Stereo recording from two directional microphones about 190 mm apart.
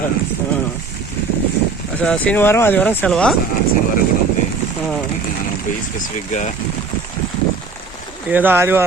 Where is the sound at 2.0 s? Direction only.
5° left (ahead or behind).